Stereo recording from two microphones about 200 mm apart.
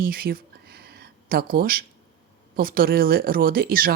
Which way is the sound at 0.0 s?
45° right (ahead or behind).